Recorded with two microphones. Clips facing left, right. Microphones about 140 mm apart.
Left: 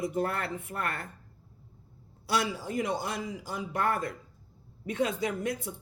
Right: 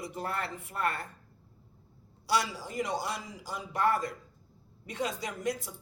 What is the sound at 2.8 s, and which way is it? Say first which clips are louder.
Speech: left 2 dB; 55° left (ahead or behind).